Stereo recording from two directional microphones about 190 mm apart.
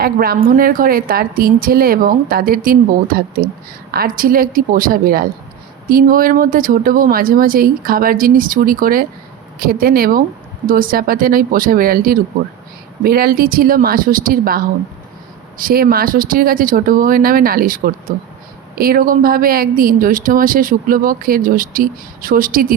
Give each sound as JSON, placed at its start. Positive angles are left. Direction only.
{"t": 0.0, "sound": "speech", "side_deg": -50}